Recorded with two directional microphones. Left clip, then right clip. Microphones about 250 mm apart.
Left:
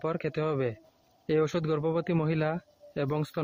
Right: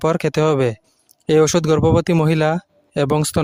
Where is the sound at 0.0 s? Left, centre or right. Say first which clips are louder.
Right 14 dB; right.